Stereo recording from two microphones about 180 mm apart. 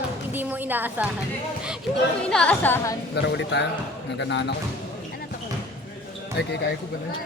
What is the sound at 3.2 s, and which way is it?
Speech, 70° left (ahead or behind).